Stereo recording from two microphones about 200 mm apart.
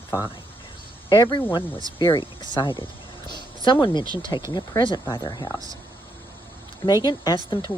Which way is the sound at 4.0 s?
20° right (ahead or behind).